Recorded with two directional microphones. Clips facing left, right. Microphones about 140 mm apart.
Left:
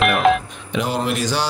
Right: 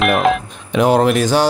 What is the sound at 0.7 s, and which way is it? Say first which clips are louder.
Speech: right 9 dB; 55° right (ahead or behind).